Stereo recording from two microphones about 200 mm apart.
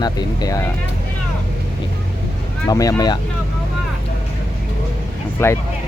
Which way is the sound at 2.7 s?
15° left (ahead or behind).